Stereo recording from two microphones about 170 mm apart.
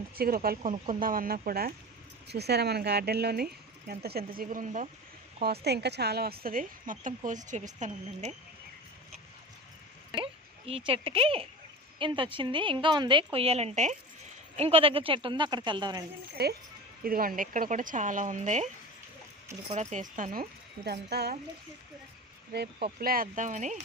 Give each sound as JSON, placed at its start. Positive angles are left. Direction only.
{"t": 0.2, "sound": "speech", "side_deg": -60}
{"t": 2.2, "sound": "speech", "side_deg": -75}
{"t": 4.4, "sound": "speech", "side_deg": -50}
{"t": 5.4, "sound": "speech", "side_deg": -70}
{"t": 10.7, "sound": "speech", "side_deg": -35}
{"t": 16.4, "sound": "speech", "side_deg": -70}
{"t": 17.0, "sound": "speech", "side_deg": -60}
{"t": 19.7, "sound": "speech", "side_deg": -45}
{"t": 22.5, "sound": "speech", "side_deg": -70}